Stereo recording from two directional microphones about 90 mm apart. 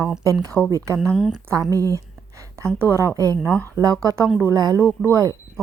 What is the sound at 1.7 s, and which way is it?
A woman's voice, 40° right (ahead or behind).